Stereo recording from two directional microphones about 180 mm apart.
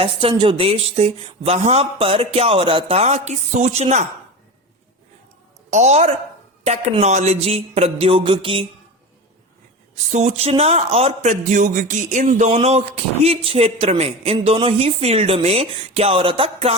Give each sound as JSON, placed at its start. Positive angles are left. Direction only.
{"t": 0.0, "sound": "a man's voice", "side_deg": -30}
{"t": 5.7, "sound": "a man's voice", "side_deg": -40}
{"t": 10.1, "sound": "a man's voice", "side_deg": -35}